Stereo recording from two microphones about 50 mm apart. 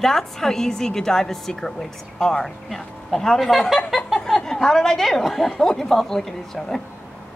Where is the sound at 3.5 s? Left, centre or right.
Centre.